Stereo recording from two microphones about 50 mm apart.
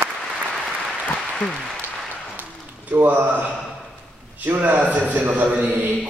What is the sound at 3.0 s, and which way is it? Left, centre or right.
A man's voice, right.